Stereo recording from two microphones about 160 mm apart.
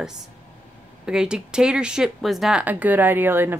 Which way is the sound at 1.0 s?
5° right (ahead or behind).